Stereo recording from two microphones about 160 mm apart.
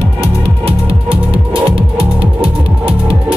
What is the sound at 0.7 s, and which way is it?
Music, 35° right (ahead or behind).